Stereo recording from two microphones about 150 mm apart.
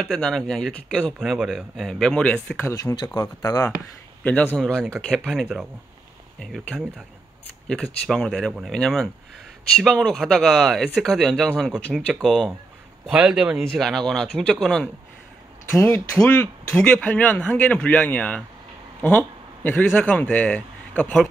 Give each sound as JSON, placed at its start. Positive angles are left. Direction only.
{"t": 0.0, "sound": "speech", "side_deg": 5}
{"t": 2.6, "sound": "speech", "side_deg": 20}
{"t": 4.2, "sound": "a man's voice", "side_deg": 10}
{"t": 15.8, "sound": "a man's voice", "side_deg": 15}